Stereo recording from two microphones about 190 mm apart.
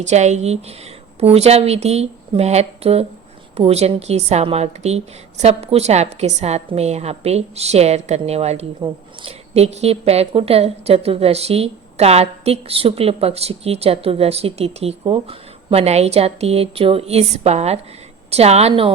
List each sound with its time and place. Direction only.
0.0 s a woman's voice: 35° right (ahead or behind)